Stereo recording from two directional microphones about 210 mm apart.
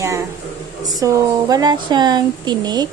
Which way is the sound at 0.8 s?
15° right (ahead or behind).